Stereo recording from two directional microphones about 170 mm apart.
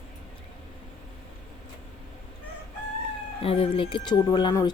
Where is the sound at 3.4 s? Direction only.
35° left (ahead or behind).